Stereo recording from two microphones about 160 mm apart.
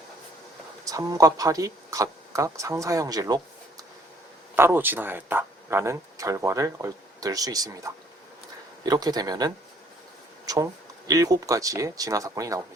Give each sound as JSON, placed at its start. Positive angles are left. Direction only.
{"t": 0.9, "sound": "speech", "side_deg": -25}
{"t": 4.5, "sound": "speech", "side_deg": -15}